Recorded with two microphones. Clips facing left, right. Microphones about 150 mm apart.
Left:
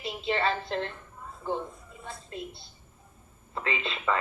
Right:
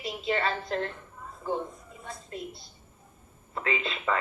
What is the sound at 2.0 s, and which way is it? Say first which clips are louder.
Speech: even; 30° left (ahead or behind).